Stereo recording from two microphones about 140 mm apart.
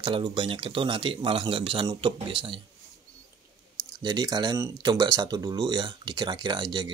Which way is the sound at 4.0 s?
30° right (ahead or behind).